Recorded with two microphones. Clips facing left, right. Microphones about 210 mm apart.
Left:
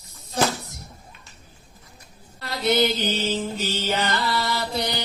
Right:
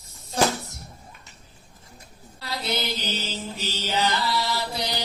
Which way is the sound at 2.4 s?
50° left (ahead or behind).